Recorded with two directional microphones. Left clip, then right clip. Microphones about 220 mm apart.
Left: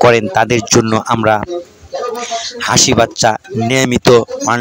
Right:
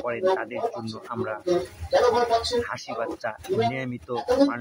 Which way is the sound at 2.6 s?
45° left (ahead or behind).